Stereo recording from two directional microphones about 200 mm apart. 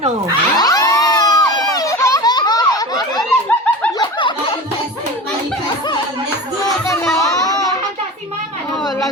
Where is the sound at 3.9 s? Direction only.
20° left (ahead or behind).